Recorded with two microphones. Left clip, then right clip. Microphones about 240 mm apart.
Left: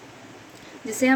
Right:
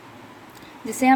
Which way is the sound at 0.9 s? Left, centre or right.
Right.